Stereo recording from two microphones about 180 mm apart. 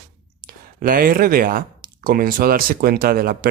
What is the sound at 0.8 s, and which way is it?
Speech, 50° right (ahead or behind).